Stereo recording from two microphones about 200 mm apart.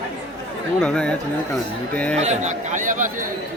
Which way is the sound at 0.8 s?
5° left (ahead or behind).